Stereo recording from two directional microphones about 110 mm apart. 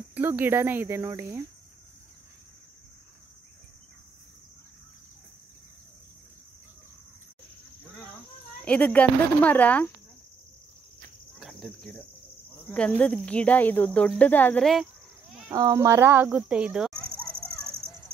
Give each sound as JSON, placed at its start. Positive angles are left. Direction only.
{"t": 0.1, "sound": "speech", "side_deg": -15}
{"t": 8.6, "sound": "speech", "side_deg": 10}
{"t": 11.3, "sound": "cricket", "side_deg": 0}
{"t": 12.6, "sound": "speech", "side_deg": 10}
{"t": 14.6, "sound": "speech", "side_deg": 0}
{"t": 15.5, "sound": "speech", "side_deg": -30}
{"t": 16.9, "sound": "a sound", "side_deg": 10}